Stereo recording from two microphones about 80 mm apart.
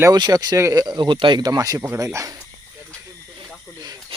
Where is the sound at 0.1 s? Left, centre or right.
Right.